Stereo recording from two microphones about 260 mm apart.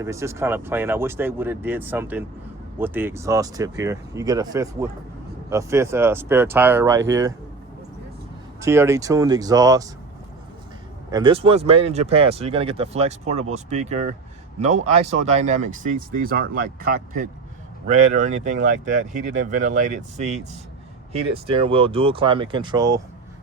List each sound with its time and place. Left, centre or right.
0.0 s speech: centre
8.6 s speech: centre
11.1 s speech: centre; by 16.6 s right
17.8 s speech: right